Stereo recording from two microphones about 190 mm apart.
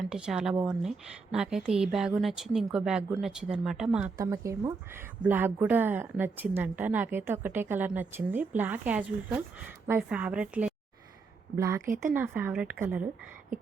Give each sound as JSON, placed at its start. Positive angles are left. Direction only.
{"t": 0.0, "sound": "speech", "side_deg": -5}
{"t": 4.2, "sound": "a woman's voice", "side_deg": -15}